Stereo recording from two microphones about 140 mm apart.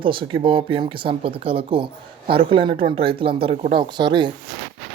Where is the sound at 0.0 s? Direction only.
35° right (ahead or behind).